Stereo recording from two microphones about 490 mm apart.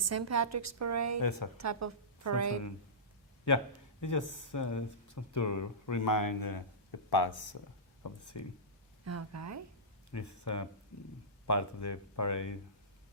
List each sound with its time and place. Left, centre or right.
0.0 s a woman's voice: right
1.2 s speech: left
1.5 s a woman's voice: right
4.0 s speech: left
8.0 s speech: left
9.0 s a woman's voice: right
10.1 s speech: left